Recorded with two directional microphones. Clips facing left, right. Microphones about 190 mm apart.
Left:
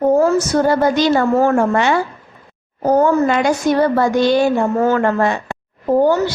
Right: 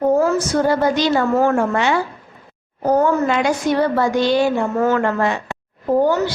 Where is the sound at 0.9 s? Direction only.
45° left (ahead or behind).